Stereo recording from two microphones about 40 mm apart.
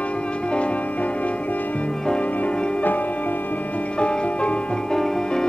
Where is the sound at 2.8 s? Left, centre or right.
Left.